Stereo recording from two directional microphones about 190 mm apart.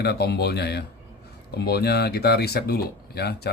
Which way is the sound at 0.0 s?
60° left (ahead or behind).